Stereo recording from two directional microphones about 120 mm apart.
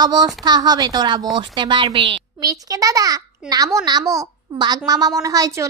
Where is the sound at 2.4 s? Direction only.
30° right (ahead or behind).